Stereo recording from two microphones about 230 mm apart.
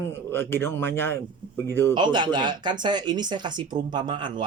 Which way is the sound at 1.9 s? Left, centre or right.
Centre.